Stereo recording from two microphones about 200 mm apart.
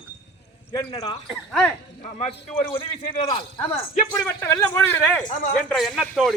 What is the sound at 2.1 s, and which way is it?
A man's voice, 30° left (ahead or behind).